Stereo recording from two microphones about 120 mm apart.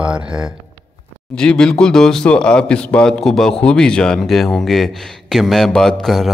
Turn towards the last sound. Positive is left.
turn(degrees=5)  # may be behind; listen again after turning